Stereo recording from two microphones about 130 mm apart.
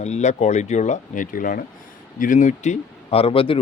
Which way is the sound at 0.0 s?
60° left (ahead or behind).